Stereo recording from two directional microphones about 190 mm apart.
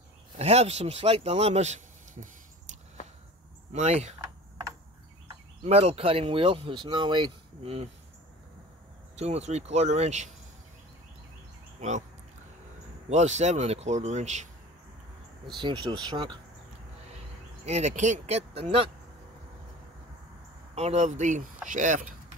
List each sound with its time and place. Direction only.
0.4 s speech: 35° right (ahead or behind)
3.7 s speech: 35° right (ahead or behind)
5.6 s speech: 35° right (ahead or behind)
9.1 s speech: 35° right (ahead or behind)
13.1 s speech: 35° right (ahead or behind)
15.5 s speech: 25° right (ahead or behind)
17.6 s speech: 35° right (ahead or behind)
20.7 s speech: 35° right (ahead or behind)